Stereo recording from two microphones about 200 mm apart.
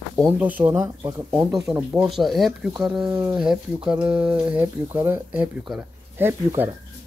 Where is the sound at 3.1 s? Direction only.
15° right (ahead or behind).